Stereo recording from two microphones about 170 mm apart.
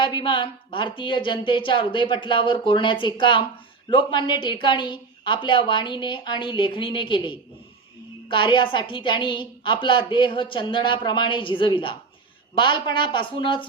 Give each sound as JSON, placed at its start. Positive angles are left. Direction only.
{"t": 0.0, "sound": "a woman's voice", "side_deg": 30}